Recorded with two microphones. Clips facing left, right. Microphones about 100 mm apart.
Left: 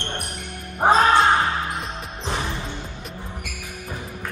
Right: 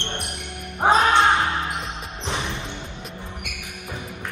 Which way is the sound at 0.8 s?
20° right (ahead or behind).